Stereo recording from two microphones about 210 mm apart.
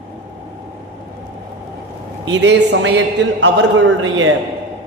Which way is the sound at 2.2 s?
60° right (ahead or behind).